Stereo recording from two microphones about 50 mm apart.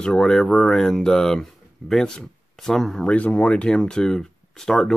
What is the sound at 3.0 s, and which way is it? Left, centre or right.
Speech, left.